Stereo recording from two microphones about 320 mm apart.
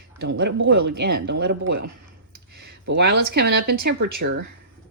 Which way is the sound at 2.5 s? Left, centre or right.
Right.